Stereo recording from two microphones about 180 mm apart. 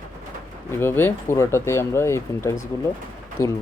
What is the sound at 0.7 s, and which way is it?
Speech, 15° left (ahead or behind).